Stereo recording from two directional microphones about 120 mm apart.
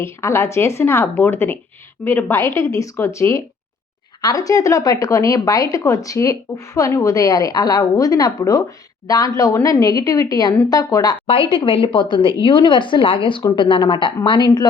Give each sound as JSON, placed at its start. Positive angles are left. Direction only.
{"t": 0.0, "sound": "speech", "side_deg": 20}
{"t": 11.3, "sound": "speech", "side_deg": 45}